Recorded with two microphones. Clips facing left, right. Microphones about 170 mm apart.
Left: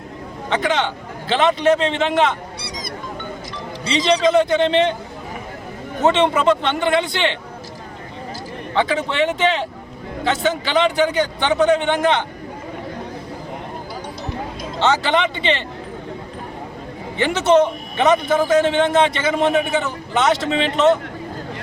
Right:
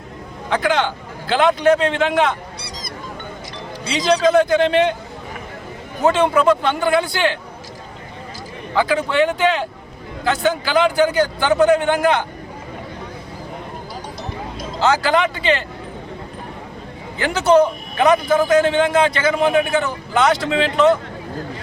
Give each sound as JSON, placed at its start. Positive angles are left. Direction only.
{"t": 0.5, "sound": "a man's voice", "side_deg": 0}
{"t": 3.8, "sound": "a man's voice", "side_deg": -5}
{"t": 6.2, "sound": "a man's voice", "side_deg": -5}
{"t": 7.0, "sound": "speech", "side_deg": 25}
{"t": 8.7, "sound": "a man's voice", "side_deg": -5}
{"t": 14.8, "sound": "a man's voice", "side_deg": 0}
{"t": 17.2, "sound": "a man's voice", "side_deg": 0}